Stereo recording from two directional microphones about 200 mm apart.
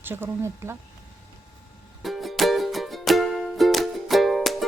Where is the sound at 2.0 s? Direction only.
Centre (ahead or behind).